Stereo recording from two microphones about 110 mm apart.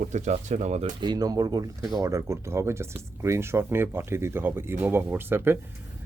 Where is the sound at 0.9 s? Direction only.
40° right (ahead or behind).